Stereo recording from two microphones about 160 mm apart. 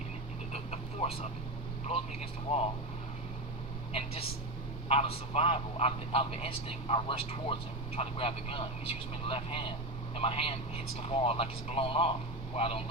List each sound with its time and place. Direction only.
0.5 s a sound: 40° left (ahead or behind)
2.5 s a man's voice: 35° left (ahead or behind)
3.9 s a man's voice: 35° left (ahead or behind)